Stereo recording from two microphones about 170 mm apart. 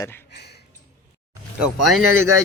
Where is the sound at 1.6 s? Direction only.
Centre (ahead or behind).